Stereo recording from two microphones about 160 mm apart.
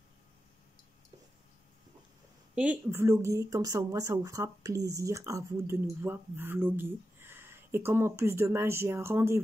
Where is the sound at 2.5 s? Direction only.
10° right (ahead or behind).